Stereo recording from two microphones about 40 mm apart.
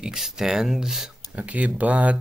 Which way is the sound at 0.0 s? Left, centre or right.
Centre.